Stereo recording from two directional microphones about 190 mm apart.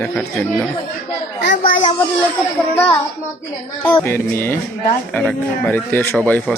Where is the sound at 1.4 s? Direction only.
65° left (ahead or behind).